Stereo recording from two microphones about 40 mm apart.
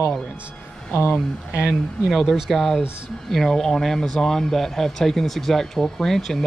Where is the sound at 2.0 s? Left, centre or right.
Centre.